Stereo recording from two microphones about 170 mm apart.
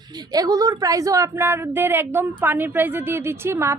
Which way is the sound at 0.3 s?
20° right (ahead or behind).